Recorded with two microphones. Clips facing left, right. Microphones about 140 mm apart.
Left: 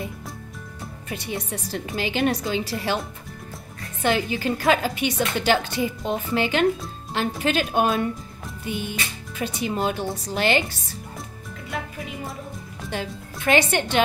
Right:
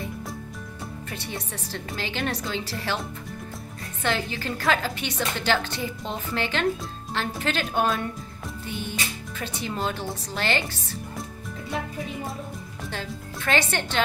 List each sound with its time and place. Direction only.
1.1 s a woman's voice: 15° left (ahead or behind)
4.0 s a woman's voice: 15° left (ahead or behind)
12.9 s a woman's voice: 15° left (ahead or behind)